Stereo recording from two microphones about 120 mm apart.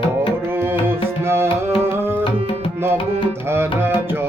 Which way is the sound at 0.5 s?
20° right (ahead or behind).